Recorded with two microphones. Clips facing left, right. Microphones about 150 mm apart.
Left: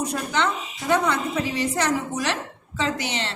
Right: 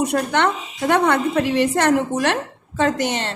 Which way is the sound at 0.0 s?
65° right (ahead or behind).